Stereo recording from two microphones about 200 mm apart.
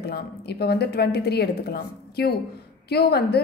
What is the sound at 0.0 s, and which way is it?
A woman's voice, 55° left (ahead or behind).